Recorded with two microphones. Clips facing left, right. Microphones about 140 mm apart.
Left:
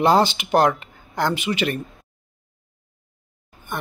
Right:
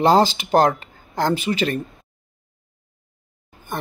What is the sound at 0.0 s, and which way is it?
Speech, 35° right (ahead or behind).